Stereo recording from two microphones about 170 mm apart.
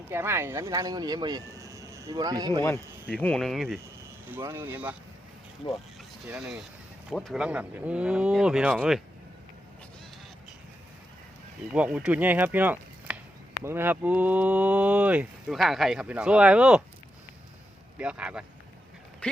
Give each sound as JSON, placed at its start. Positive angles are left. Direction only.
{"t": 0.1, "sound": "speech", "side_deg": -15}
{"t": 3.1, "sound": "speech", "side_deg": 5}
{"t": 4.3, "sound": "speech", "side_deg": -15}
{"t": 6.2, "sound": "speech", "side_deg": -5}
{"t": 11.7, "sound": "speech", "side_deg": -5}
{"t": 17.9, "sound": "speech", "side_deg": -5}
{"t": 19.2, "sound": "a sound", "side_deg": 5}